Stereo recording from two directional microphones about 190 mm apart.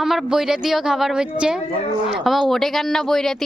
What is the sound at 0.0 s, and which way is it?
Speech, centre (ahead or behind).